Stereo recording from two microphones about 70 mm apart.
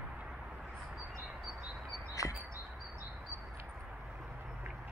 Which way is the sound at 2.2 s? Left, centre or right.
Left.